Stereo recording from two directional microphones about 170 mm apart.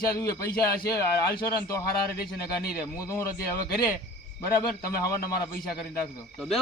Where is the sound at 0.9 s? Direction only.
20° left (ahead or behind).